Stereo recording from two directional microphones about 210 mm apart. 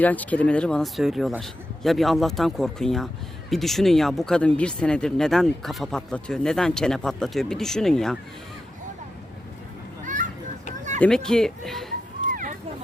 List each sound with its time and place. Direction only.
0.0 s speech: 5° left (ahead or behind)
11.0 s speech: 5° left (ahead or behind)
12.3 s a sound: 40° right (ahead or behind)